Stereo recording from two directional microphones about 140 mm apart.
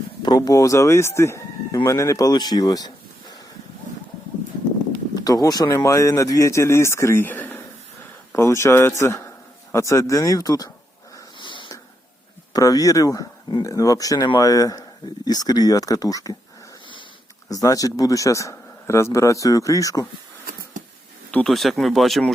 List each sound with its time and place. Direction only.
0.2 s speech: 30° left (ahead or behind)
5.1 s speech: 25° left (ahead or behind)
11.3 s a sound: 35° left (ahead or behind)
12.5 s speech: 25° left (ahead or behind)
17.5 s speech: 25° left (ahead or behind)
20.5 s a sound: 90° right
21.2 s speech: 5° left (ahead or behind)